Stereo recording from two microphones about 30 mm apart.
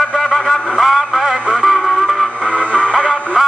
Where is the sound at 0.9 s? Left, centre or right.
Centre.